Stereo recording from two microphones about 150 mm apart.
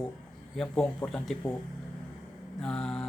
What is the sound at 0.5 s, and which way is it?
Speech, 5° left (ahead or behind).